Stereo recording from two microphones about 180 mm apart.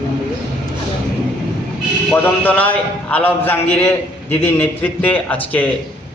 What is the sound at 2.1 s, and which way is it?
A man's voice, 10° left (ahead or behind).